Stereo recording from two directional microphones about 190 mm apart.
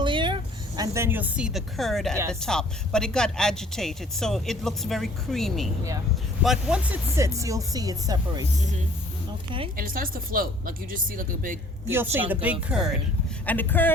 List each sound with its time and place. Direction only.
0.0 s vehicle: 25° right (ahead or behind)
0.8 s speech: 15° right (ahead or behind)
9.7 s speech: 50° right (ahead or behind)
12.1 s speech: 10° right (ahead or behind)
13.4 s speech: 10° left (ahead or behind)